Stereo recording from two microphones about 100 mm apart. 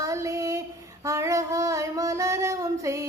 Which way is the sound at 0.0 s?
30° right (ahead or behind).